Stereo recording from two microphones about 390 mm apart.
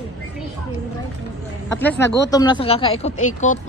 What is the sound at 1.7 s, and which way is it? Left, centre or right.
Speech, centre.